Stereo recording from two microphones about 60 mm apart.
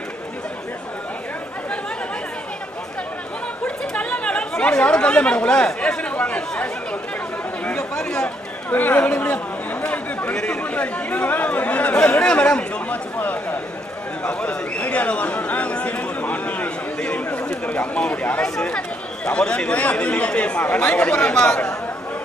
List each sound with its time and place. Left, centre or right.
3.6 s chatter: centre
8.6 s speech: left
13.2 s a man's voice: left
14.2 s speech: left